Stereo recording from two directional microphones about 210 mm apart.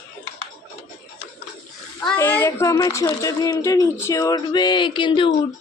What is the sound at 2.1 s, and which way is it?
Speech, 10° left (ahead or behind).